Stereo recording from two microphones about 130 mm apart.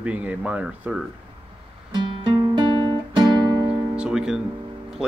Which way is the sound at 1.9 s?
35° right (ahead or behind).